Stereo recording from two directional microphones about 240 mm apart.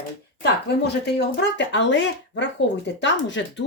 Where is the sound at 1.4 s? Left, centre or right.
Left.